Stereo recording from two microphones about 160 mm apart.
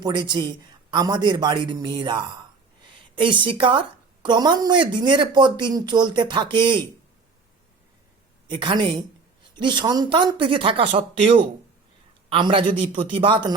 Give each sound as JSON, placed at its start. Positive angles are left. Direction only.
{"t": 0.0, "sound": "a woman's voice", "side_deg": -30}
{"t": 8.4, "sound": "a woman's voice", "side_deg": -30}